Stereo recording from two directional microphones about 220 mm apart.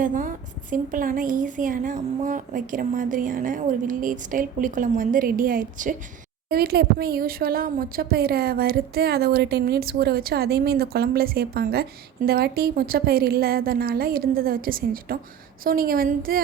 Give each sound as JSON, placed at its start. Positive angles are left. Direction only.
{"t": 0.0, "sound": "a woman's voice", "side_deg": -35}